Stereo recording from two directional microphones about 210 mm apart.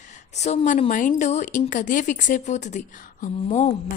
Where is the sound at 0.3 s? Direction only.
30° left (ahead or behind).